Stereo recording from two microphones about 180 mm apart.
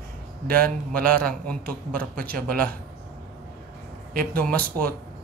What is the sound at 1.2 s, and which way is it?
Speech, 5° left (ahead or behind).